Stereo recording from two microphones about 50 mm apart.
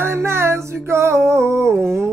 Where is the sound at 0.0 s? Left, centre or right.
Right.